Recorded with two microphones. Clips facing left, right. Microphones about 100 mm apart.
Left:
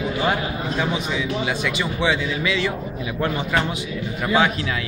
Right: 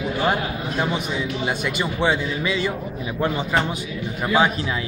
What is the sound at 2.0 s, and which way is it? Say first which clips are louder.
Speech: right 1 dB; 40° right (ahead or behind).